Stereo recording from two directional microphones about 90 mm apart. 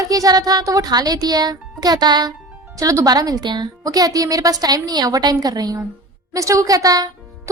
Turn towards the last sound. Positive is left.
turn(degrees=-40)  # may be behind; listen again after turning